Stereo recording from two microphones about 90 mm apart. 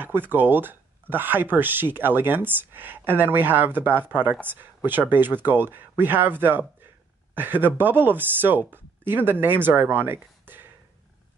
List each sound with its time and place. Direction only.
0.0 s speech: 20° right (ahead or behind)